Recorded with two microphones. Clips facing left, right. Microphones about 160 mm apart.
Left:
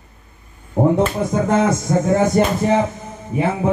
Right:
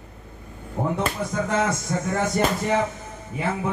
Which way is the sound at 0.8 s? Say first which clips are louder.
Left 9 dB; 45° left (ahead or behind).